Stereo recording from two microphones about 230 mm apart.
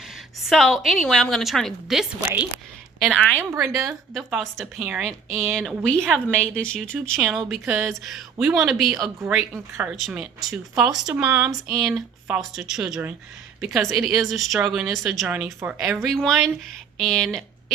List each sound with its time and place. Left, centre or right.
0.0 s a woman's voice: centre
3.2 s a woman's voice: centre
5.3 s a woman's voice: centre